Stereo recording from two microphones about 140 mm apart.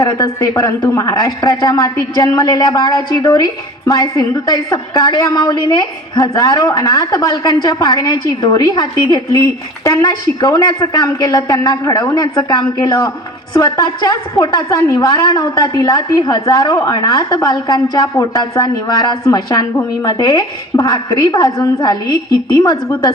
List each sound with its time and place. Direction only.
0.0 s speech: 25° left (ahead or behind)